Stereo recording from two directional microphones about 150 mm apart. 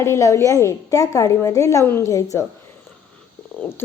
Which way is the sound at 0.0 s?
20° left (ahead or behind).